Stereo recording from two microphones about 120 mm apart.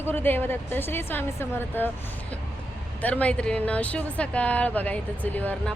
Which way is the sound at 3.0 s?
15° left (ahead or behind).